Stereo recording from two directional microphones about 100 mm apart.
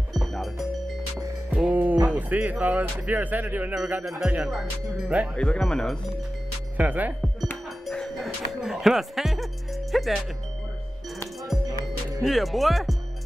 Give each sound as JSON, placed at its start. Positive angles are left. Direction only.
{"t": 0.1, "sound": "music", "side_deg": 0}
{"t": 1.5, "sound": "music", "side_deg": -15}
{"t": 2.0, "sound": "cattle", "side_deg": -15}
{"t": 2.6, "sound": "speech", "side_deg": -15}
{"t": 4.2, "sound": "speech", "side_deg": -5}
{"t": 6.8, "sound": "speech", "side_deg": -15}
{"t": 7.8, "sound": "music", "side_deg": 5}
{"t": 12.2, "sound": "speech", "side_deg": 0}